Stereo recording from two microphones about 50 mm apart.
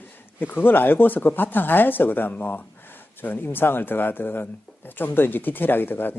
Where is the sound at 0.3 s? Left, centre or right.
Left.